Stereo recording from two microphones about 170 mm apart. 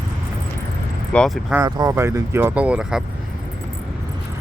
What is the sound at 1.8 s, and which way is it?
Speech, 20° right (ahead or behind).